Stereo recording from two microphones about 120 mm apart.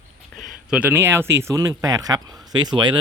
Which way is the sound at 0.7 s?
15° right (ahead or behind).